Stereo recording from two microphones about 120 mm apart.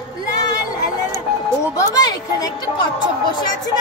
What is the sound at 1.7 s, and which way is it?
A woman's voice, 35° left (ahead or behind).